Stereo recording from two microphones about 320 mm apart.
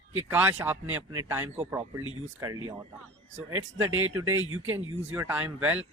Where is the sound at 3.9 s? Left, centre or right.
Right.